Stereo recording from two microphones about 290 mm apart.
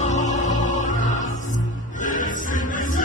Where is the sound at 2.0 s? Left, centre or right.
Left.